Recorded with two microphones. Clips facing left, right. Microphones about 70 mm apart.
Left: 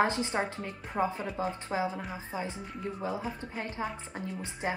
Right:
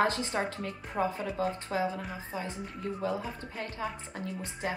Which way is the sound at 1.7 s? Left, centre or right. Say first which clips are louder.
Even; centre.